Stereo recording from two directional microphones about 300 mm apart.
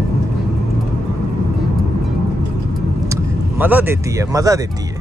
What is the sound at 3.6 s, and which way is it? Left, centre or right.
Speech, centre.